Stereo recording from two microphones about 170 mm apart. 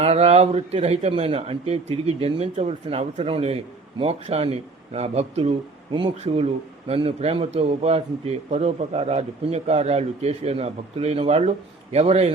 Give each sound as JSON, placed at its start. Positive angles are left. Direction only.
{"t": 0.0, "sound": "a man's voice", "side_deg": -40}